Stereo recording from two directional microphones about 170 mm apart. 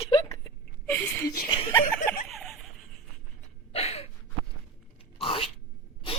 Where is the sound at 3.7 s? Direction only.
35° left (ahead or behind).